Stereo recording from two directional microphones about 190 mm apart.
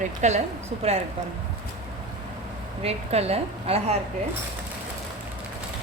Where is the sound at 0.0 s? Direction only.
40° right (ahead or behind).